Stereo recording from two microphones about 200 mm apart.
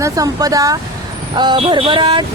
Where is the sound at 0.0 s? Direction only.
15° right (ahead or behind).